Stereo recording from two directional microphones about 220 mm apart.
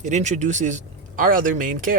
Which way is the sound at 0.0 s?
35° right (ahead or behind).